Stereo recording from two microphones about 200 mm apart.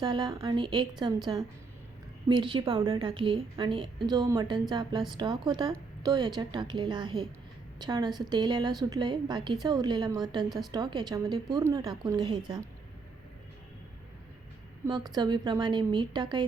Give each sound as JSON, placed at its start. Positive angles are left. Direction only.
{"t": 0.0, "sound": "a woman's voice", "side_deg": -25}
{"t": 14.8, "sound": "a woman's voice", "side_deg": -20}